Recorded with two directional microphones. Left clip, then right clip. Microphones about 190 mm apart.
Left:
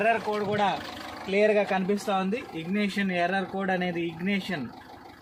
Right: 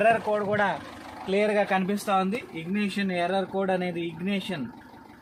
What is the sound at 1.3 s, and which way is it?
Speech, 35° right (ahead or behind).